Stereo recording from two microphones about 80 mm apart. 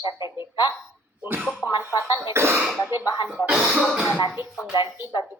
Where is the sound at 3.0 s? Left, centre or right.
Left.